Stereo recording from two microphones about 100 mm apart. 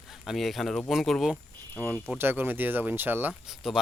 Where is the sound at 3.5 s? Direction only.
5° right (ahead or behind).